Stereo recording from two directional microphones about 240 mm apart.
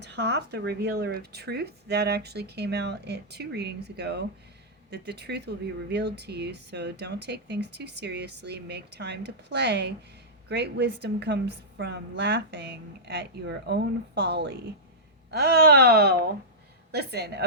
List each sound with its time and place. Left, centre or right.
0.0 s speech: right